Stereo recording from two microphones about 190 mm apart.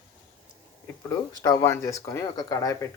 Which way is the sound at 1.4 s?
20° left (ahead or behind).